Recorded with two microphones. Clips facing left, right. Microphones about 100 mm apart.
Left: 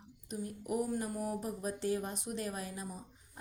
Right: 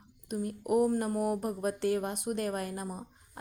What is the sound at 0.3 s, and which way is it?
A woman's voice, 60° right (ahead or behind).